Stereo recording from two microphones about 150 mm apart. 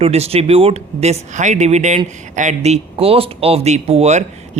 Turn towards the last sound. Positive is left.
turn(degrees=-45)  # may be behind; listen again after turning